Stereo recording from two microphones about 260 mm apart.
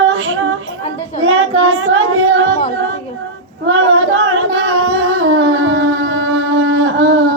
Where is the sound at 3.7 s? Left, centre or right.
Right.